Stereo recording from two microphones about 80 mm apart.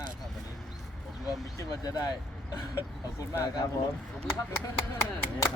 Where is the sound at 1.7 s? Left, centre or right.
Left.